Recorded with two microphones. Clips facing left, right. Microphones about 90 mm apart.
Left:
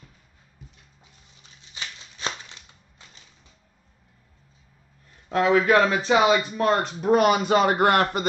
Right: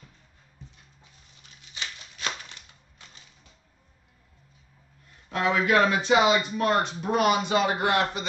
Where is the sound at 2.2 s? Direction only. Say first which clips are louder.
Left 2 dB; 25° left (ahead or behind).